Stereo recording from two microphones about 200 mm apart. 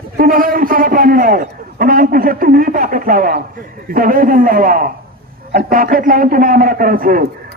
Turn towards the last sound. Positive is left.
turn(degrees=-45)  # may be behind; listen again after turning